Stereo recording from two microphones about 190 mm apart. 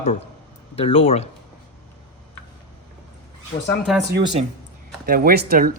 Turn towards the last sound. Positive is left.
turn(degrees=-50)  # may be behind; listen again after turning